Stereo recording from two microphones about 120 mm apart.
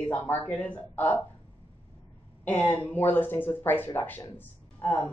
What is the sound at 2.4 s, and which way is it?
Speech, 15° left (ahead or behind).